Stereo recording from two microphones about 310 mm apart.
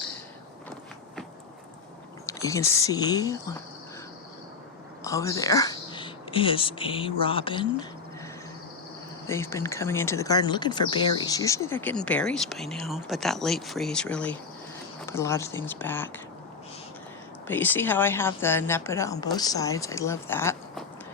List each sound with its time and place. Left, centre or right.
2.2 s speech: centre
5.0 s speech: centre
9.2 s speech: centre
17.5 s speech: centre